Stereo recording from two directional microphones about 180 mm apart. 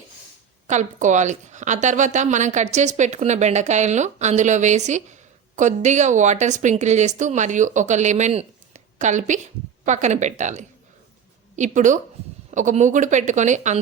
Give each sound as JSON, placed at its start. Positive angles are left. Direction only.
{"t": 0.7, "sound": "a woman's voice", "side_deg": -45}